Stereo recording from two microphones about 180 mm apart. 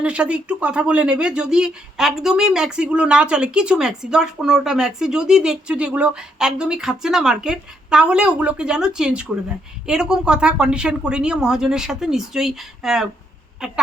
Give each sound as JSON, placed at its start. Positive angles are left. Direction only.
{"t": 0.0, "sound": "speech", "side_deg": -5}